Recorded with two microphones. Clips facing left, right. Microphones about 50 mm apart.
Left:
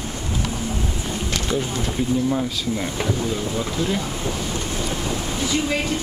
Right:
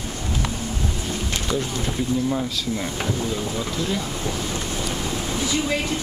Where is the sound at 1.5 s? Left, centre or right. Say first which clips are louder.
Left 1 dB; centre.